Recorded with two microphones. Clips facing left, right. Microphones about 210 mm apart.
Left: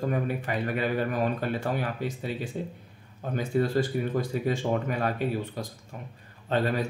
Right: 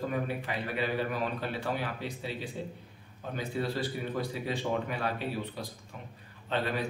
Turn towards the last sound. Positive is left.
turn(degrees=45)  # may be behind; listen again after turning